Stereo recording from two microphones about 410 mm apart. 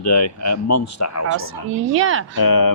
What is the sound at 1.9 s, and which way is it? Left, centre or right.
Speech, right.